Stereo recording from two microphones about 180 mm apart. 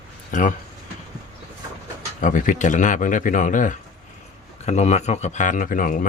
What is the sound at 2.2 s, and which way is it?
Speech, 45° left (ahead or behind).